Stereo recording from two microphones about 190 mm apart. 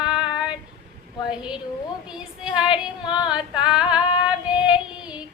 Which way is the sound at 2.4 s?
5° right (ahead or behind).